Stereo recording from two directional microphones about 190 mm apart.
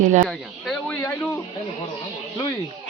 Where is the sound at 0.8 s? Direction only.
10° left (ahead or behind).